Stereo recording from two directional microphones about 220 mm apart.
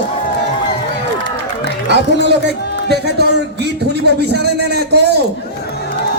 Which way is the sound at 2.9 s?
50° right (ahead or behind).